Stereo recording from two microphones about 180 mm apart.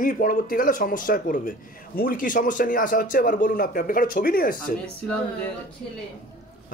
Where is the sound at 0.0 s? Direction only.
50° left (ahead or behind).